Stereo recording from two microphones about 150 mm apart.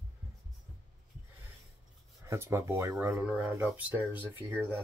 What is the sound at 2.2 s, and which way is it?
Speech, 20° right (ahead or behind).